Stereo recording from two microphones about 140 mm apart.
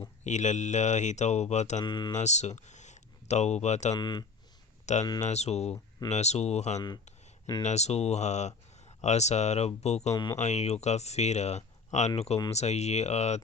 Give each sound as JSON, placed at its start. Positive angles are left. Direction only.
{"t": 0.3, "sound": "speech", "side_deg": 55}
{"t": 1.8, "sound": "speech", "side_deg": 30}
{"t": 2.1, "sound": "speech", "side_deg": 55}
{"t": 3.9, "sound": "speech", "side_deg": 30}
{"t": 4.9, "sound": "speech", "side_deg": 55}